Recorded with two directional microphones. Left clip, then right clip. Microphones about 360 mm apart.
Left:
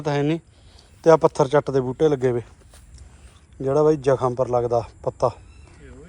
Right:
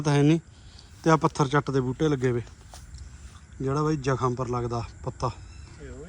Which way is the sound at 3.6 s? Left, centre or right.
Centre.